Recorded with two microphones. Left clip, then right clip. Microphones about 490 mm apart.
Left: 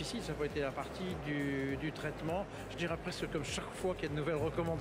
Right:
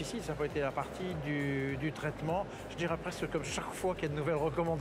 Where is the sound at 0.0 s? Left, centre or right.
Right.